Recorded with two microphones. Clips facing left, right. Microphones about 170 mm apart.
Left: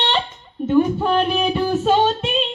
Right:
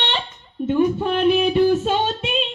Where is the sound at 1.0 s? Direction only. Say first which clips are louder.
Right 1 dB; 40° left (ahead or behind).